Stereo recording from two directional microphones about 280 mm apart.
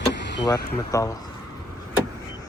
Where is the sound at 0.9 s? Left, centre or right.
Centre.